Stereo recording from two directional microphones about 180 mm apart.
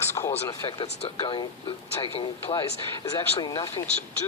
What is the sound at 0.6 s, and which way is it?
Speech, 30° left (ahead or behind).